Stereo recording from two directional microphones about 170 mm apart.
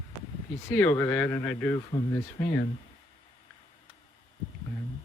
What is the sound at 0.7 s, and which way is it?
Speech, 10° left (ahead or behind).